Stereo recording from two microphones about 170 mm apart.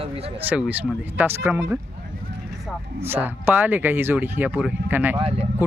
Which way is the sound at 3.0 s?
10° right (ahead or behind).